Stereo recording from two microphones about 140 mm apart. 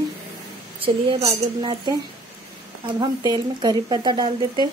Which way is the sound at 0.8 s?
45° right (ahead or behind).